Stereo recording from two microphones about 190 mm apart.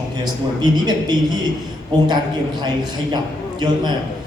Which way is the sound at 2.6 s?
20° right (ahead or behind).